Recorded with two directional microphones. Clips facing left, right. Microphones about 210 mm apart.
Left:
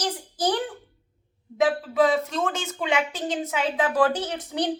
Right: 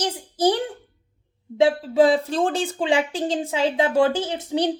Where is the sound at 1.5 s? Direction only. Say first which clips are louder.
Right 4 dB; 30° right (ahead or behind).